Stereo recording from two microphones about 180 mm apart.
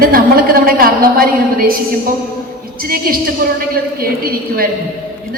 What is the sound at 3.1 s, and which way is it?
Speech, 55° right (ahead or behind).